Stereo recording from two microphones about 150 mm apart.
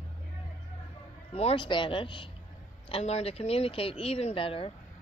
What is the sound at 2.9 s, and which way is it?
Speech, 45° left (ahead or behind).